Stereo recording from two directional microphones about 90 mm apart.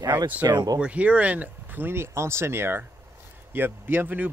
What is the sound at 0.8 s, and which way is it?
Speech, 15° right (ahead or behind).